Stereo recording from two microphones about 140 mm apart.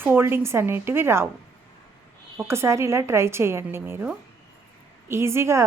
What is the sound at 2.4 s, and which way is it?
A woman's voice, 20° right (ahead or behind).